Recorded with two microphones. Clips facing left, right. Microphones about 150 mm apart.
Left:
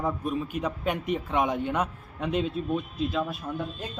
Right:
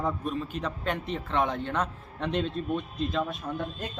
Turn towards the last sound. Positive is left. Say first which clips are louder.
# even
turn(degrees=0)  # may be behind; listen again after turning